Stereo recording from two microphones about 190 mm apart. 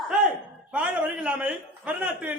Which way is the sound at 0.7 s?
5° right (ahead or behind).